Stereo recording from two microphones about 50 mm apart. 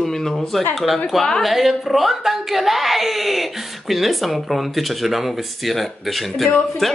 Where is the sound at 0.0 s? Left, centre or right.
Centre.